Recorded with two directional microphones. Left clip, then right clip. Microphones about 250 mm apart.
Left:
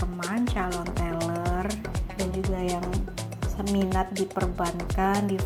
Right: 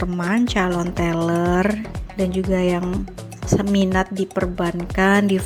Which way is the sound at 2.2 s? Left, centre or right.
Centre.